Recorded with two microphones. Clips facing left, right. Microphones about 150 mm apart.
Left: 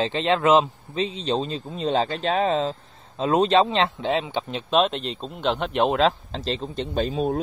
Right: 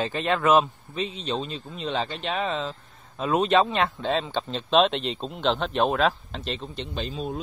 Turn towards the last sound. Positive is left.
turn(degrees=50)  # may be behind; listen again after turning